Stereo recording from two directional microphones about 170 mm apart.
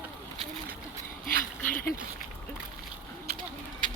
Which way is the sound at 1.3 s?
60° left (ahead or behind).